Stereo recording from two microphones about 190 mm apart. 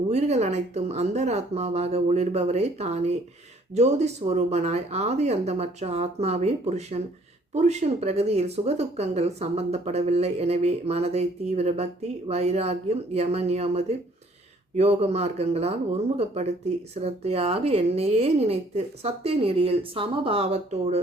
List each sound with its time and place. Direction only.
0.1 s speech: 35° right (ahead or behind)